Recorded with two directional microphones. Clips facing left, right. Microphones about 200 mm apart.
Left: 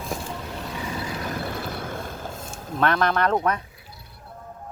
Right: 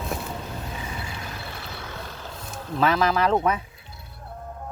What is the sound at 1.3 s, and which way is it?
Vehicle, 50° left (ahead or behind).